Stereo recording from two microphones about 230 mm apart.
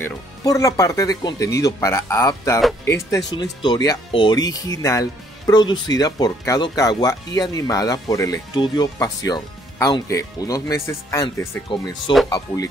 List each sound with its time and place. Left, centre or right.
0.0 s speech: centre